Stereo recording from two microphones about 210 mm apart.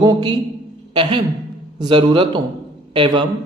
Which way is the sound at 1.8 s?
25° right (ahead or behind).